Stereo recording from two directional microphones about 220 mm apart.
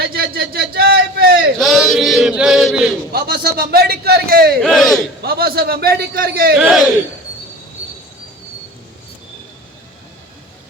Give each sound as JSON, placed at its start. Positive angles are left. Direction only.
{"t": 0.0, "sound": "a sound", "side_deg": -45}
{"t": 1.5, "sound": "chant", "side_deg": 0}
{"t": 3.1, "sound": "a man's voice", "side_deg": -45}
{"t": 4.6, "sound": "speech", "side_deg": 0}
{"t": 5.2, "sound": "a man's voice", "side_deg": -45}
{"t": 6.6, "sound": "speech", "side_deg": 0}